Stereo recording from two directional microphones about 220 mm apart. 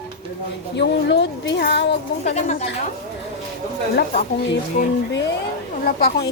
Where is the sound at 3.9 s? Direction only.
45° left (ahead or behind).